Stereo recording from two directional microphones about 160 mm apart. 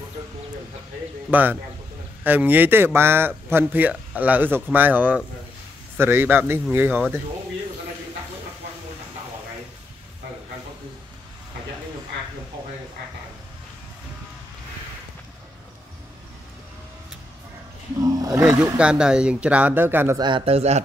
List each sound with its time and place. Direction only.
1.3 s speech: 10° right (ahead or behind)
18.4 s speech: 5° right (ahead or behind)
20.2 s speech: 30° right (ahead or behind)